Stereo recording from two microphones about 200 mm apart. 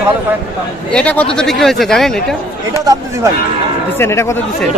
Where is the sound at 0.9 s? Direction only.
5° left (ahead or behind).